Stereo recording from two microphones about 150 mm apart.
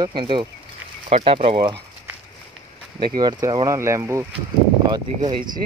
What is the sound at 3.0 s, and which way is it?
Speech, 30° right (ahead or behind).